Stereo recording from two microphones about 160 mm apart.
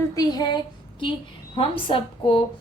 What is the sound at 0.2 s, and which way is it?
A woman's voice, 25° left (ahead or behind).